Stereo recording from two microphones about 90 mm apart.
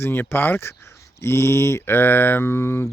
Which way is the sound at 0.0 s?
25° left (ahead or behind).